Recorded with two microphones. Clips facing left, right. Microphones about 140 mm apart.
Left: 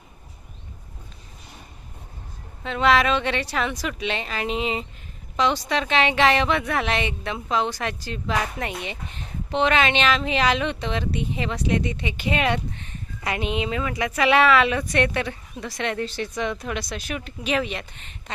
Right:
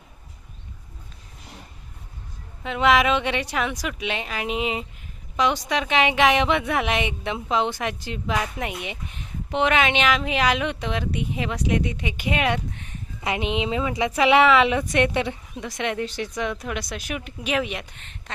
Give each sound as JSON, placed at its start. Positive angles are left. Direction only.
{"t": 2.6, "sound": "a woman's voice", "side_deg": -15}
{"t": 13.2, "sound": "a woman's voice", "side_deg": -20}